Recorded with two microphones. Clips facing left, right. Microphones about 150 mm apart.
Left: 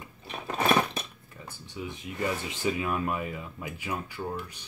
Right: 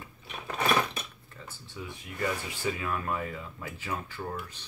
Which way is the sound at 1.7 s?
20° left (ahead or behind).